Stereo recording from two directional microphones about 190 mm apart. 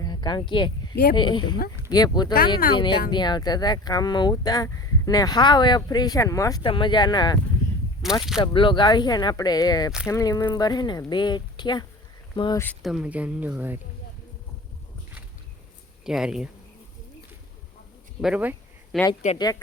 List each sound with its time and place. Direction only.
0.0 s a sound: 20° left (ahead or behind)
1.1 s speech: 25° left (ahead or behind)
8.0 s speech: centre (ahead or behind)
8.4 s speech: 25° left (ahead or behind)
12.8 s speech: 5° right (ahead or behind)
16.0 s speech: 5° right (ahead or behind)
18.2 s a sound: 5° right (ahead or behind)
19.4 s speech: 20° left (ahead or behind)